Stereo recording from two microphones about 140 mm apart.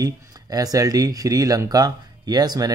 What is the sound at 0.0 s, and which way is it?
Speech, 25° right (ahead or behind).